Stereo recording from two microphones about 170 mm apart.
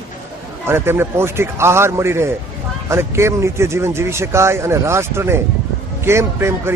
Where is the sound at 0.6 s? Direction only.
15° right (ahead or behind).